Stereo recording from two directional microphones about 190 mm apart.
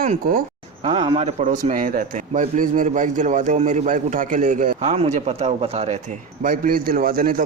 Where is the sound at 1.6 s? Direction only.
45° right (ahead or behind).